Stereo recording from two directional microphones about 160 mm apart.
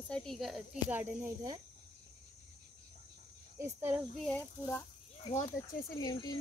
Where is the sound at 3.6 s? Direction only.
15° right (ahead or behind).